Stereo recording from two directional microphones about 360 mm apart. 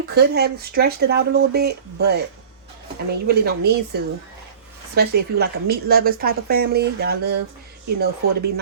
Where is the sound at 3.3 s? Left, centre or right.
Right.